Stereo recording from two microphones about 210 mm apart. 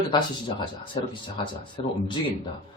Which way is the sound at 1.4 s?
25° left (ahead or behind).